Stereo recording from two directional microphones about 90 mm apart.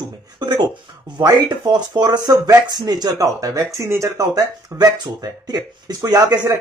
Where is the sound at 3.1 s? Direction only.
35° right (ahead or behind).